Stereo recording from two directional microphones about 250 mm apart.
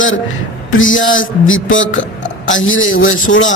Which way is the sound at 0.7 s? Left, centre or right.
Left.